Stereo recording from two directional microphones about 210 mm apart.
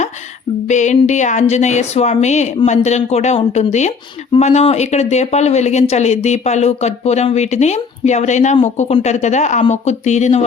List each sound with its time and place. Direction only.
0.7 s a woman's voice: 35° left (ahead or behind)